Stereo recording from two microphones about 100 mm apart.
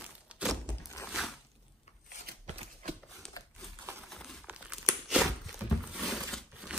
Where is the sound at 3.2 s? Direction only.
5° left (ahead or behind).